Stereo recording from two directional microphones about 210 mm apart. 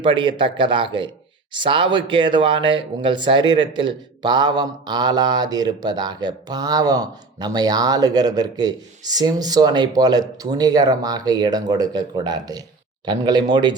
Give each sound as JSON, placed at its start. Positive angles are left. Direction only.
{"t": 0.0, "sound": "speech", "side_deg": -20}